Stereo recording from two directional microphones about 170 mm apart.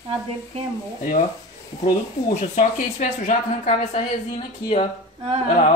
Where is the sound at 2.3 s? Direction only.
45° left (ahead or behind).